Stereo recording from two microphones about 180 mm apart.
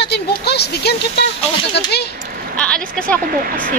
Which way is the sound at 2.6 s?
5° left (ahead or behind).